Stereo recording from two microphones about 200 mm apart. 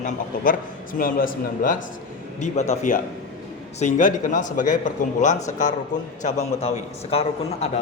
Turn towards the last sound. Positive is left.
turn(degrees=30)  # may be behind; listen again after turning